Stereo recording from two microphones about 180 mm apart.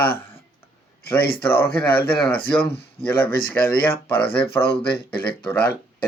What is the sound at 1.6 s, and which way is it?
Speech, 60° left (ahead or behind).